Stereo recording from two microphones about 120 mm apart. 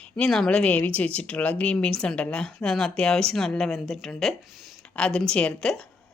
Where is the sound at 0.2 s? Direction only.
5° left (ahead or behind).